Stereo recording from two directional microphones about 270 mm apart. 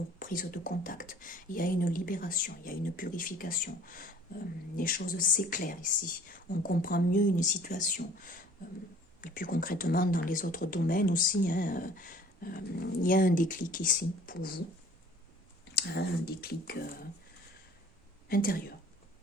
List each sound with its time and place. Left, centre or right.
0.2 s speech: left
9.2 s speech: left
15.7 s speech: left
18.3 s speech: left